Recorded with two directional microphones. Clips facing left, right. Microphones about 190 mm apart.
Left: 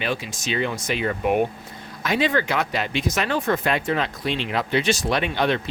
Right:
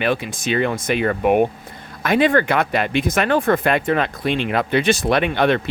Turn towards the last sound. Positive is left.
turn(degrees=-55)  # may be behind; listen again after turning